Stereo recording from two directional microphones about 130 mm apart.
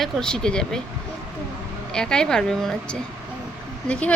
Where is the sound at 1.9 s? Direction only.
5° left (ahead or behind).